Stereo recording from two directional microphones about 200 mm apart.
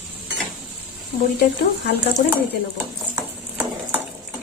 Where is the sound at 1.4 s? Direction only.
55° left (ahead or behind).